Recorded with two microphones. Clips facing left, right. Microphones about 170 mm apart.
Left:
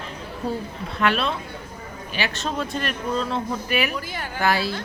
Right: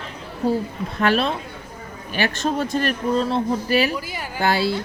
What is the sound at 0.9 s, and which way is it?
Speech, 40° right (ahead or behind).